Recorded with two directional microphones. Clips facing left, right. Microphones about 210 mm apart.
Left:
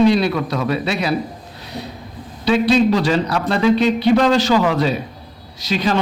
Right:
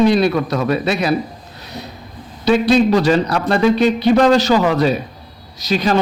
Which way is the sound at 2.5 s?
45° right (ahead or behind).